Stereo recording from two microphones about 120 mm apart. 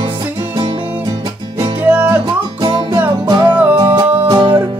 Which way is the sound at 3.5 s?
10° right (ahead or behind).